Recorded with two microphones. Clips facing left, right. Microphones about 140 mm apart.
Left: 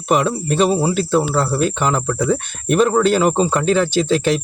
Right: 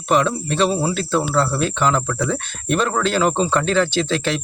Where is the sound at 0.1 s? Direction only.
10° left (ahead or behind).